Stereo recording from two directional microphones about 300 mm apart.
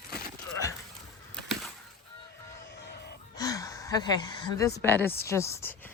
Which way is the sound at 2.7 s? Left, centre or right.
Left.